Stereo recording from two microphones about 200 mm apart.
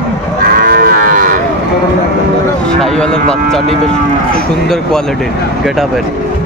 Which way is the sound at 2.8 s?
5° left (ahead or behind).